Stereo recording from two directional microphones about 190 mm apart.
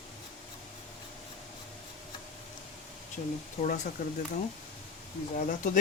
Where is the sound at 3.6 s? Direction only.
35° left (ahead or behind).